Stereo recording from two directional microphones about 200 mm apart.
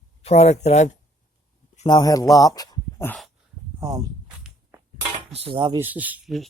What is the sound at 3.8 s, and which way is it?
Speech, 15° right (ahead or behind).